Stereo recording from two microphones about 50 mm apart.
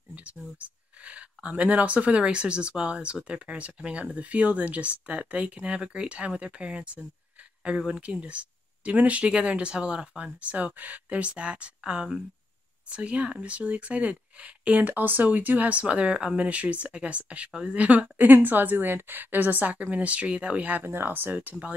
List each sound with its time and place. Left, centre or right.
0.1 s a woman's voice: right
20.8 s a woman's voice: right